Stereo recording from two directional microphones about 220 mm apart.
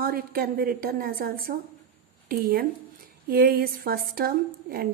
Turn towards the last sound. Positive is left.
turn(degrees=-40)  # may be behind; listen again after turning